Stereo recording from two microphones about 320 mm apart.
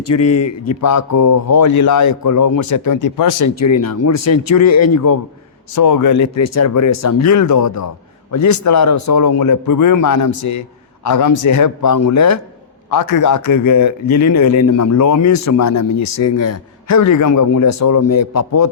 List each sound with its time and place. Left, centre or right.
0.1 s a man's voice: left
5.7 s speech: left
12.9 s speech: left